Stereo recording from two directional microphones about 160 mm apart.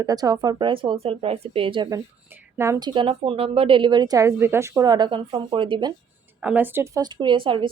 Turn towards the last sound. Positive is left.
turn(degrees=-30)  # may be behind; listen again after turning